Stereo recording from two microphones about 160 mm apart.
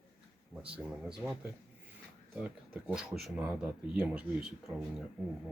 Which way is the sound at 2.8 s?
5° right (ahead or behind).